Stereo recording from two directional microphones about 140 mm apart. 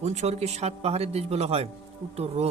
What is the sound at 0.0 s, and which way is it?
Speech, 55° right (ahead or behind).